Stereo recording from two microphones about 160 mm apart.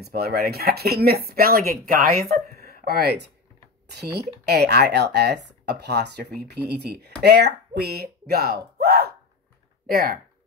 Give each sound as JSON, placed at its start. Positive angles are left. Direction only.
{"t": 0.0, "sound": "speech", "side_deg": -75}
{"t": 3.9, "sound": "speech", "side_deg": -90}
{"t": 9.8, "sound": "speech", "side_deg": -60}